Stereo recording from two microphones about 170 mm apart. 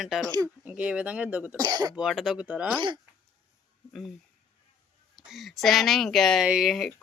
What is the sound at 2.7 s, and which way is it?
Speech, 25° right (ahead or behind).